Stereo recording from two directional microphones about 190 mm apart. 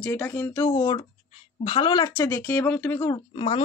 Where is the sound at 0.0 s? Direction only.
10° left (ahead or behind).